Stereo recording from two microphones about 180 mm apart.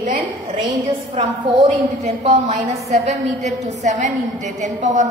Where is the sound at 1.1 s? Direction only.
35° right (ahead or behind).